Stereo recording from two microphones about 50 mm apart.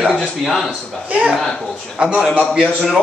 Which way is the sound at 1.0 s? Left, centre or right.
Right.